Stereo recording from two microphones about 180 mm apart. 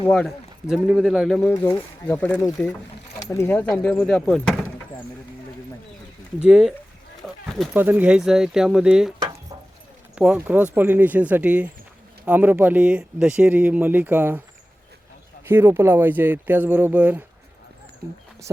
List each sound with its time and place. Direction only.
0.1 s speech: centre (ahead or behind)
1.5 s speech: 15° left (ahead or behind)
6.4 s speech: 5° right (ahead or behind)
7.2 s a sound: 5° right (ahead or behind)
7.6 s speech: 10° right (ahead or behind)
10.2 s speech: 5° right (ahead or behind)
15.4 s speech: 10° right (ahead or behind)